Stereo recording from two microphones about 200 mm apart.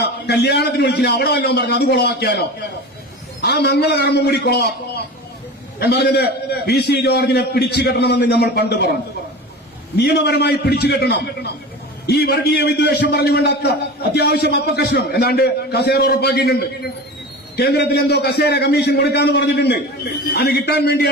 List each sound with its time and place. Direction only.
0.0 s a man's voice: 55° left (ahead or behind)
10.0 s a man's voice: 55° left (ahead or behind)